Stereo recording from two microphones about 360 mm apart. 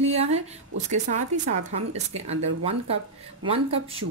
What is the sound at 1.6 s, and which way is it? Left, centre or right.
A woman's voice, centre.